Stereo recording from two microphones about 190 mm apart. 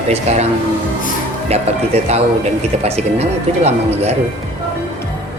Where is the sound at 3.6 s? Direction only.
35° right (ahead or behind).